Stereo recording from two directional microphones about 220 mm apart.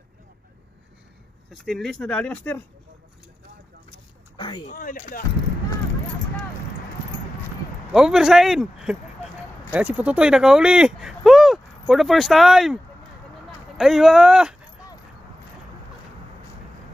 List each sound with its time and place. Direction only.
1.5 s speech: centre (ahead or behind)
4.4 s speech: 20° left (ahead or behind)
4.7 s speech: 35° left (ahead or behind)
7.9 s speech: centre (ahead or behind)
13.7 s speech: centre (ahead or behind)